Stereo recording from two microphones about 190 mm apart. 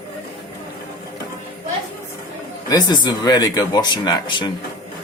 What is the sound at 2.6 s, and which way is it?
Speech, 20° left (ahead or behind).